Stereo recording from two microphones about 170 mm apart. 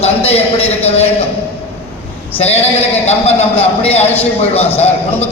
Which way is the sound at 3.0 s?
35° left (ahead or behind).